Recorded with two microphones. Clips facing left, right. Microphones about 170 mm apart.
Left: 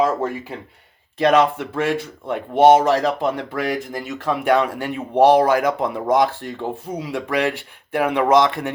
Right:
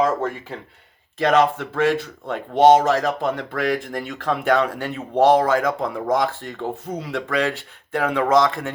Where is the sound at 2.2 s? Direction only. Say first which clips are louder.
Left 1 dB; 10° left (ahead or behind).